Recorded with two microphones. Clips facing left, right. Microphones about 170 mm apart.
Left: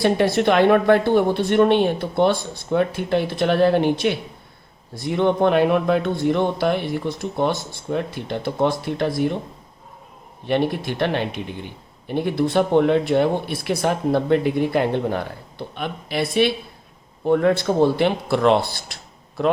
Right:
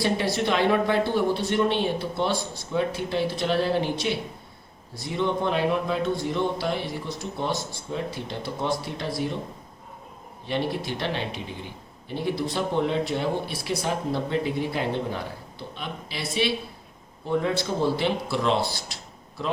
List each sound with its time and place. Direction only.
0.0 s speech: 60° left (ahead or behind)
10.4 s speech: 60° left (ahead or behind)